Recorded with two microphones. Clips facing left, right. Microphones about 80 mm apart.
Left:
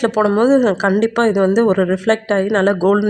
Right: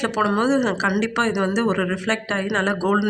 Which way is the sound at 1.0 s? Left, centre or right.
Left.